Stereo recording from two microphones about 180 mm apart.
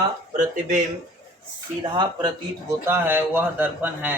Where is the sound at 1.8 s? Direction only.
25° right (ahead or behind).